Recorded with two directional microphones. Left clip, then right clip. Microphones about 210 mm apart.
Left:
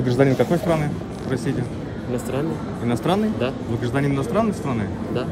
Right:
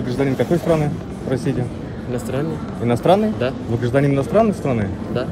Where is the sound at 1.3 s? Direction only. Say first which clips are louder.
Right 4 dB; 10° left (ahead or behind).